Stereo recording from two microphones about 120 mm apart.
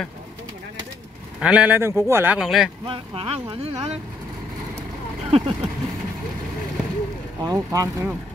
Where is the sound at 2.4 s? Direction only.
5° right (ahead or behind).